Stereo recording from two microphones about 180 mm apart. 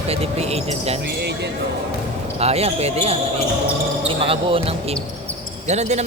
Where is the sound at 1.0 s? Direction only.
65° right (ahead or behind).